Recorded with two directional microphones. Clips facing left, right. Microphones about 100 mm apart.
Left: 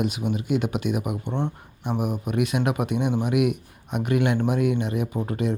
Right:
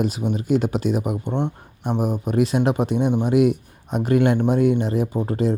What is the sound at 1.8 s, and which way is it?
Speech, 35° right (ahead or behind).